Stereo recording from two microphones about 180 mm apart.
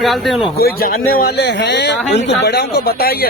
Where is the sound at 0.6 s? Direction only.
60° left (ahead or behind).